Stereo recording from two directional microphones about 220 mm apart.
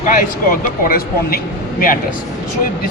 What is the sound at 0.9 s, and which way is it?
Speech, 45° left (ahead or behind).